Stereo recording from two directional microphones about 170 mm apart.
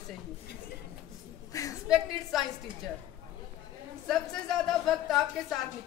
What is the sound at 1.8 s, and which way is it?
Speech, 5° right (ahead or behind).